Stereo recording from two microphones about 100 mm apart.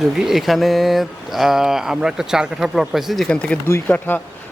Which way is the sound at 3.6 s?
20° left (ahead or behind).